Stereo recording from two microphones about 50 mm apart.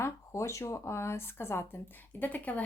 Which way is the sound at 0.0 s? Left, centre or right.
Left.